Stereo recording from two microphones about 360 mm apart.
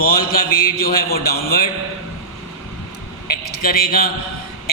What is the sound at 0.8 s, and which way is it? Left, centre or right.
Speech, left.